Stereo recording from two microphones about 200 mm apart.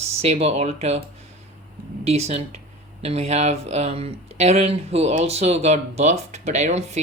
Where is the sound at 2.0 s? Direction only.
30° right (ahead or behind).